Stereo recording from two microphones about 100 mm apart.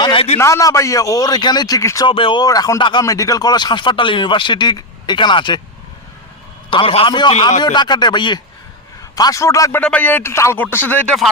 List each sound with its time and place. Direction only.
0.0 s a sound: 55° left (ahead or behind)
0.3 s a man's voice: 30° left (ahead or behind)
2.0 s a man's voice: 60° left (ahead or behind)
2.4 s a man's voice: 40° left (ahead or behind); by 5.5 s 55° left (ahead or behind)
6.7 s a man's voice: 65° left (ahead or behind)
7.1 s speech: 50° left (ahead or behind)
9.1 s a man's voice: 35° left (ahead or behind)
9.7 s a man's voice: 15° left (ahead or behind)